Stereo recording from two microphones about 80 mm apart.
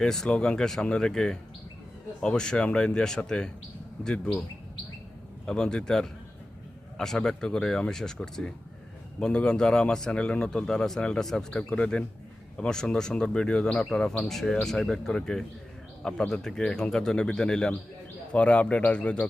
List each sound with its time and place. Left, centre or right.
0.0 s speech: centre
5.5 s speech: centre